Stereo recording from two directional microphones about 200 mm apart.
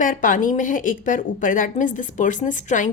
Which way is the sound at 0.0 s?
40° left (ahead or behind).